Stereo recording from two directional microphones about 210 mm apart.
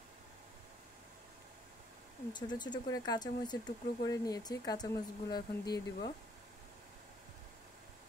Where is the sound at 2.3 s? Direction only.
20° left (ahead or behind).